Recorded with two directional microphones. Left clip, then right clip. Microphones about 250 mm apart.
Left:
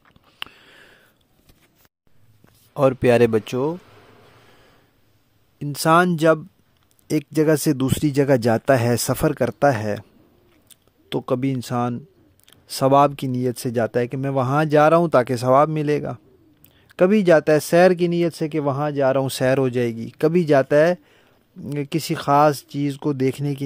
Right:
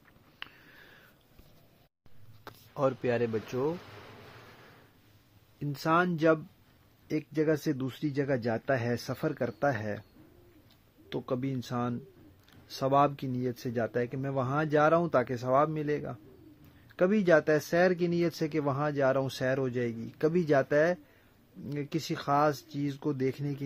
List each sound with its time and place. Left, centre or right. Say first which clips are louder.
0.4 s a sound: left 11 dB; left
2.7 s speech: left 13 dB; left
5.6 s speech: left 11 dB; left
11.1 s speech: left 11 dB; left